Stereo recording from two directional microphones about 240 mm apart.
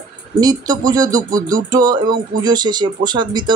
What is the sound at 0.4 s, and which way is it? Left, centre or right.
Speech, centre.